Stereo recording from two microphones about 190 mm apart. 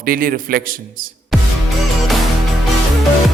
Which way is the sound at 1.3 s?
Centre (ahead or behind).